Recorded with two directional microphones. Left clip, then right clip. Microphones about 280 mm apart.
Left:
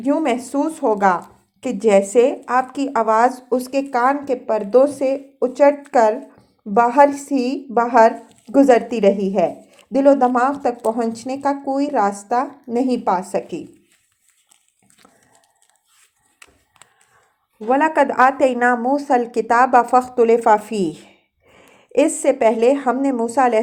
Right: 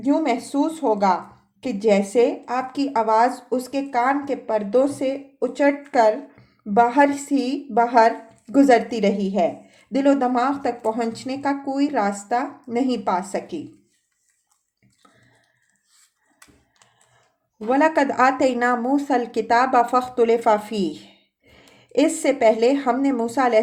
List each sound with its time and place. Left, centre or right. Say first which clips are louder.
0.0 s a woman's voice: left 2 dB; left
8.7 s a woman's voice: left 3 dB; centre
17.7 s a woman's voice: left 3 dB; centre
20.0 s a woman's voice: left 4 dB; centre